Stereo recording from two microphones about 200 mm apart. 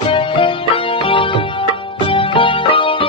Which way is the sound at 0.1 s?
25° left (ahead or behind).